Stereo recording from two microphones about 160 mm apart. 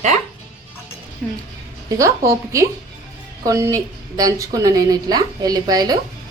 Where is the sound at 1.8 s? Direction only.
20° right (ahead or behind).